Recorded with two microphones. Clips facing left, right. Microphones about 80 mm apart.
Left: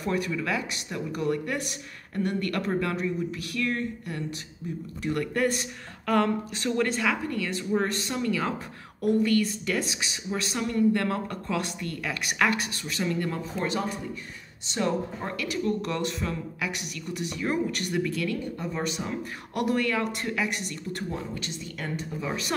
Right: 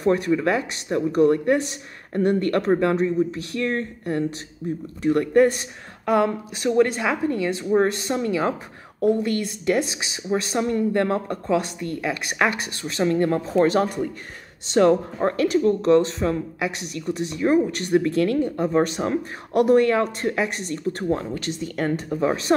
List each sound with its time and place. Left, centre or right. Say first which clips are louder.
0.0 s speech: right 9 dB; right
13.0 s speech: right 9 dB; right
19.6 s speech: right 9 dB; right
21.1 s speech: right 9 dB; right